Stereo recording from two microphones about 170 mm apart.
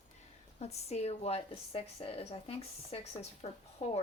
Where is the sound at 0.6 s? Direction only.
40° left (ahead or behind).